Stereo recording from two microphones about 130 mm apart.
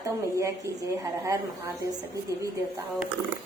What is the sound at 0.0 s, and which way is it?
A woman's voice, 25° right (ahead or behind).